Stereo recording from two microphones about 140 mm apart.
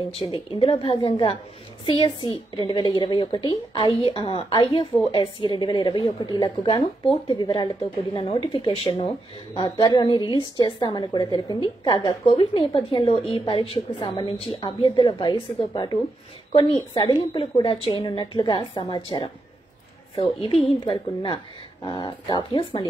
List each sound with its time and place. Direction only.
0.1 s a woman's voice: 45° left (ahead or behind)
9.6 s a woman's voice: 35° left (ahead or behind)